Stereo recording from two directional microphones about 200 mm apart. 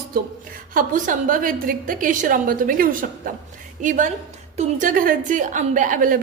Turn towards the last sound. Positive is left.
turn(degrees=-40)  # may be behind; listen again after turning